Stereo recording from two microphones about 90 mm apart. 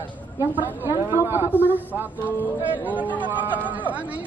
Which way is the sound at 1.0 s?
25° right (ahead or behind).